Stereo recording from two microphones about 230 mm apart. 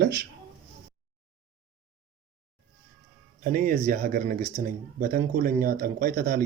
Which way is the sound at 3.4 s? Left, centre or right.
Right.